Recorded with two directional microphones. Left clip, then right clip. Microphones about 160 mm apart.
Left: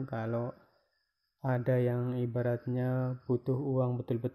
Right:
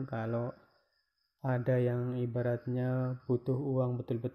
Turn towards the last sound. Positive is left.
turn(degrees=10)  # may be behind; listen again after turning